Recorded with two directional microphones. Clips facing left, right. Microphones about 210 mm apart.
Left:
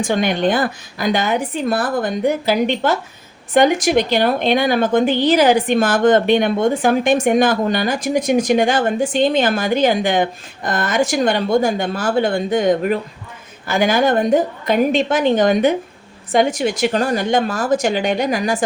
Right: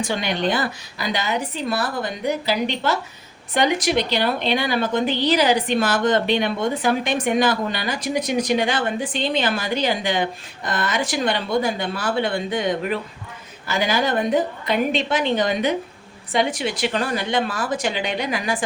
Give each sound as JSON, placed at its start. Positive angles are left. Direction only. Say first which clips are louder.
{"t": 0.0, "sound": "a woman's voice", "louder": "left 6 dB", "side_deg": 50}